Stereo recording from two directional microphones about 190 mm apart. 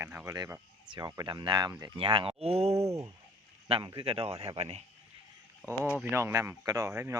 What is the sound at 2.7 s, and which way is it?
Speech, 15° right (ahead or behind).